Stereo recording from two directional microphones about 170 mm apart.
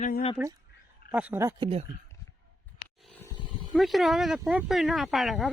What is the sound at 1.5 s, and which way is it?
Speech, 35° right (ahead or behind).